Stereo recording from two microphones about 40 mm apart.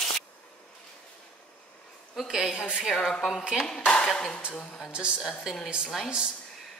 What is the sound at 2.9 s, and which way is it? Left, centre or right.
Speech, centre.